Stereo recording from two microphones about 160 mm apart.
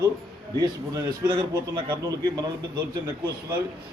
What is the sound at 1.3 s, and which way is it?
A man's voice, 20° right (ahead or behind).